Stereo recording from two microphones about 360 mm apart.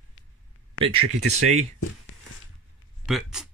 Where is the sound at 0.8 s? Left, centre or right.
Left.